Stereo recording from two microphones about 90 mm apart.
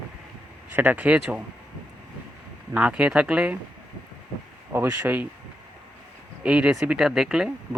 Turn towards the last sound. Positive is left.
turn(degrees=-5)  # may be behind; listen again after turning